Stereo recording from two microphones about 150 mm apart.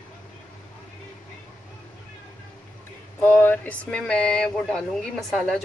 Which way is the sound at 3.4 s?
10° left (ahead or behind).